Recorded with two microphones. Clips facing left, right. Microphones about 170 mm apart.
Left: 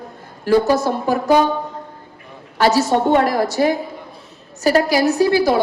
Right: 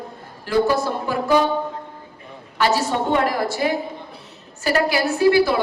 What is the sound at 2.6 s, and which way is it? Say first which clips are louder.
A woman's voice: left 5 dB; 40° left (ahead or behind).